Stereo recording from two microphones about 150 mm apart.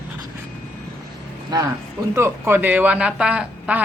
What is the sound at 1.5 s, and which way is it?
Speech, 25° right (ahead or behind).